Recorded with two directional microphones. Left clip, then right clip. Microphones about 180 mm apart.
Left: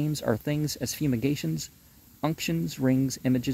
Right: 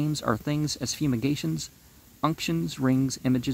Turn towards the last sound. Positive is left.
turn(degrees=15)  # may be behind; listen again after turning